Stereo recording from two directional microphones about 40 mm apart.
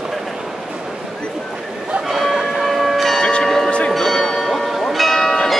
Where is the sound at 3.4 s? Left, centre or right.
Centre.